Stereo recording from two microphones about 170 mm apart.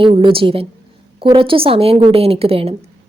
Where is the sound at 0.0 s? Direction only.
30° right (ahead or behind).